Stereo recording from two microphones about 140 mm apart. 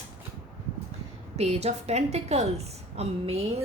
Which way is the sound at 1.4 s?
50° right (ahead or behind).